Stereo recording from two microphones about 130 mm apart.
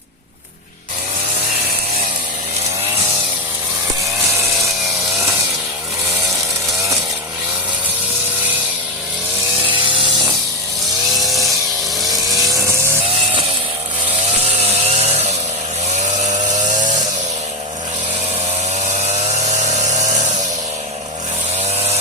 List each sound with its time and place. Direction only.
9.8 s buzz: 40° right (ahead or behind)
11.2 s chainsaw: centre (ahead or behind)
12.0 s vehicle: centre (ahead or behind)
14.6 s chainsaw: 55° right (ahead or behind)
16.2 s a sound: 65° right (ahead or behind)
18.9 s a sound: 55° right (ahead or behind)